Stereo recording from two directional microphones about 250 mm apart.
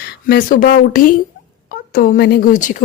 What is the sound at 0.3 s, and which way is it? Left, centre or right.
Speech, left.